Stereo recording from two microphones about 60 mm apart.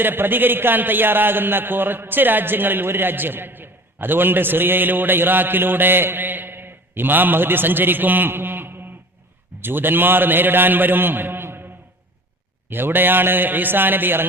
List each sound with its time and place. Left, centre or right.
0.0 s a man's voice: right
12.7 s a man's voice: right